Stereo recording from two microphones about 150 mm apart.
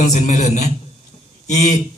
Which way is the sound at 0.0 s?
50° left (ahead or behind).